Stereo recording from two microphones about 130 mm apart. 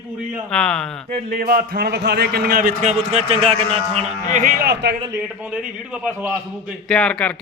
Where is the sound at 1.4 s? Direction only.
90° right.